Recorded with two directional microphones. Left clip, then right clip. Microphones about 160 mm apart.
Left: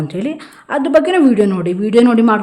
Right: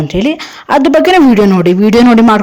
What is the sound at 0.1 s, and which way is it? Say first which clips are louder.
A woman's voice: right 9 dB; 35° right (ahead or behind).